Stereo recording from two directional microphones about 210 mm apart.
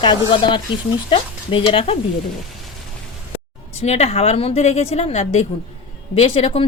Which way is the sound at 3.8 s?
30° left (ahead or behind).